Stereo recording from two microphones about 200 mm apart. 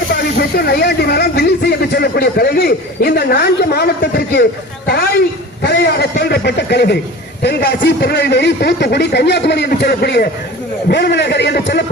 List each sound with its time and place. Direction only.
0.3 s speech: 50° left (ahead or behind)
5.6 s a man's voice: 55° left (ahead or behind)